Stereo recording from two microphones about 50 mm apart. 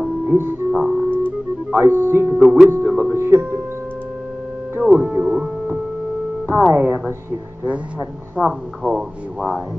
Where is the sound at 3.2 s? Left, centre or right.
Right.